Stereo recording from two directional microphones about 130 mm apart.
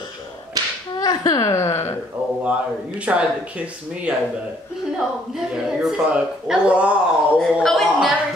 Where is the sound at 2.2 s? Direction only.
10° right (ahead or behind).